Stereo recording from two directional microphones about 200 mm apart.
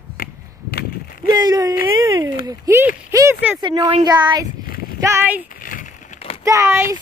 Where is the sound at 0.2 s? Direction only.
50° left (ahead or behind).